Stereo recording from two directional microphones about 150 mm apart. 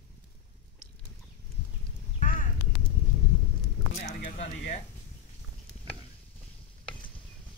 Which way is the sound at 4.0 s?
55° left (ahead or behind).